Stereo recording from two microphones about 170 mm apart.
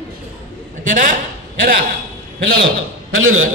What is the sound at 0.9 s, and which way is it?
Speech, 50° right (ahead or behind).